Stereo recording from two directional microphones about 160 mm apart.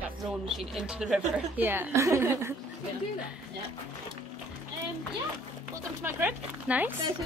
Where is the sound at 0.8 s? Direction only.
5° right (ahead or behind).